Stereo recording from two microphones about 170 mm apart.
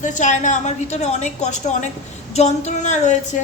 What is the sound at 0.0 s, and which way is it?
A woman's voice, 45° left (ahead or behind).